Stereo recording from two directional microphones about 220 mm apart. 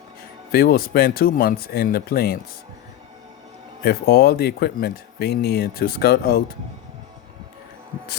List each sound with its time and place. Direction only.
0.5 s speech: 45° left (ahead or behind)
3.8 s speech: 45° left (ahead or behind)